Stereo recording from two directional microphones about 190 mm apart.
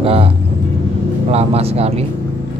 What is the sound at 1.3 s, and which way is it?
Speech, 30° right (ahead or behind).